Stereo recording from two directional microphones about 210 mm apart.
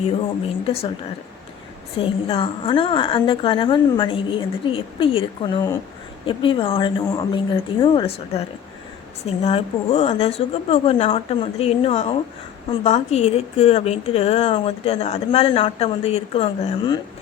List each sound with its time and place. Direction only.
2.0 s speech: 25° left (ahead or behind)